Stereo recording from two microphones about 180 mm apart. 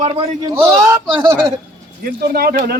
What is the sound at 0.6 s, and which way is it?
Speech, 10° right (ahead or behind).